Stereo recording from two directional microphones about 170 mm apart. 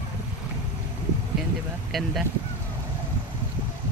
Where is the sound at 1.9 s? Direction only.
Centre (ahead or behind).